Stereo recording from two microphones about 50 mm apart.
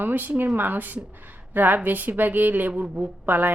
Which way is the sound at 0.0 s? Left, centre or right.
Right.